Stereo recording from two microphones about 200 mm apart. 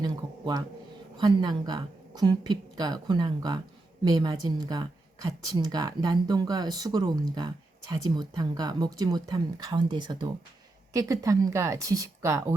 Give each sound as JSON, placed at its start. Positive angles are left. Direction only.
{"t": 0.0, "sound": "a sound", "side_deg": -20}
{"t": 1.4, "sound": "speech", "side_deg": -20}
{"t": 2.7, "sound": "speech", "side_deg": -20}